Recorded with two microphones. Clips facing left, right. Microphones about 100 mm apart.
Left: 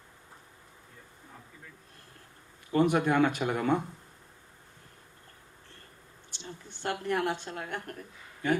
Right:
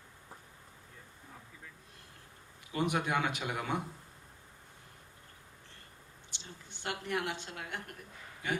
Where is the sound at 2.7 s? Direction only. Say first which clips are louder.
Left 7 dB; 50° left (ahead or behind).